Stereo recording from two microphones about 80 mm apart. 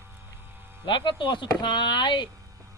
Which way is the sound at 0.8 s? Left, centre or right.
Left.